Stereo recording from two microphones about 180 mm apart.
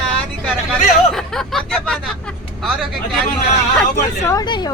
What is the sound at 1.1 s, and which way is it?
Speech, centre (ahead or behind).